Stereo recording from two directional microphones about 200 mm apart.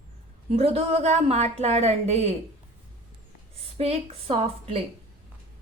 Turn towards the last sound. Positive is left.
turn(degrees=-35)  # may be behind; listen again after turning